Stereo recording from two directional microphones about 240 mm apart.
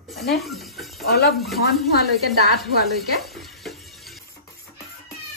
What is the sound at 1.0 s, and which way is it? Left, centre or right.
Speech, left.